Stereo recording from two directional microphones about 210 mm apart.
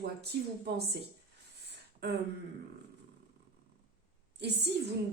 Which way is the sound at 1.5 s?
50° right (ahead or behind).